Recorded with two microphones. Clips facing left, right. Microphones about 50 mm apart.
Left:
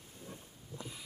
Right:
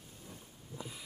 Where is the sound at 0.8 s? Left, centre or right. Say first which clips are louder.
Right 1 dB; centre.